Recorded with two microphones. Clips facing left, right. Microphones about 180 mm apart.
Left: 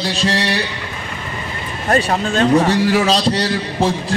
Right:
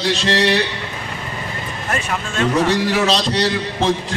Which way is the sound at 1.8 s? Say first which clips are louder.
Left 8 dB; 35° left (ahead or behind).